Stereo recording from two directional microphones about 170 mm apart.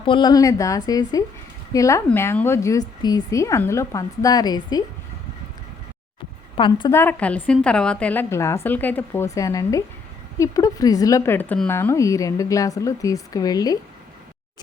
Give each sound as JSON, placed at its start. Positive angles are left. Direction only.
{"t": 0.0, "sound": "a woman's voice", "side_deg": 25}
{"t": 6.6, "sound": "speech", "side_deg": 30}
{"t": 6.9, "sound": "a woman's voice", "side_deg": 10}